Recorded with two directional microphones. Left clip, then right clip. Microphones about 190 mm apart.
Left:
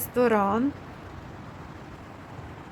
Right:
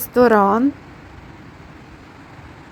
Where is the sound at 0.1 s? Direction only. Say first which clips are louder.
Right 9 dB; 20° right (ahead or behind).